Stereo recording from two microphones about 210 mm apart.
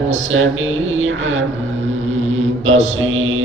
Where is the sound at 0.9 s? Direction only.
70° right (ahead or behind).